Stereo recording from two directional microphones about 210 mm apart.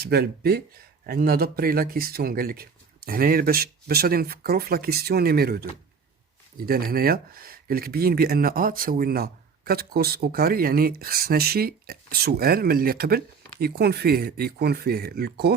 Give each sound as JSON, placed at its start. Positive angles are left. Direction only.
{"t": 0.0, "sound": "speech", "side_deg": -50}